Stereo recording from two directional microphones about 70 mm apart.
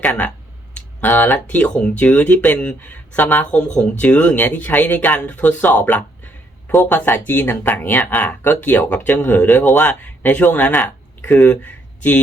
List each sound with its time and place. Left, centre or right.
0.0 s speech: left
10.8 s a sound: left
11.4 s speech: left